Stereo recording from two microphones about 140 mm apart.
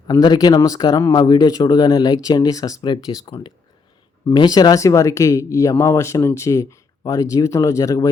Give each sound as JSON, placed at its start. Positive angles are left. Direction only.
{"t": 0.1, "sound": "speech", "side_deg": 30}